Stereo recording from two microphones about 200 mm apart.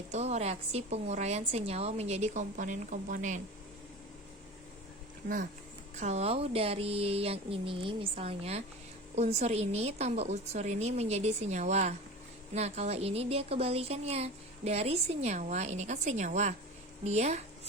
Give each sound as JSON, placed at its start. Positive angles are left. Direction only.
{"t": 0.1, "sound": "speech", "side_deg": -35}
{"t": 6.0, "sound": "a sound", "side_deg": -35}
{"t": 9.1, "sound": "speech", "side_deg": -35}